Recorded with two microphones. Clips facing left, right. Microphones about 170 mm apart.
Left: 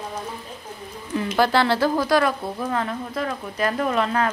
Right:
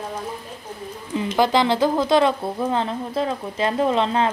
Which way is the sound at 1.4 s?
15° right (ahead or behind).